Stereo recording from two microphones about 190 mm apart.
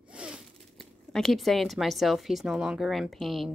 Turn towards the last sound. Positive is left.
turn(degrees=0)  # may be behind; listen again after turning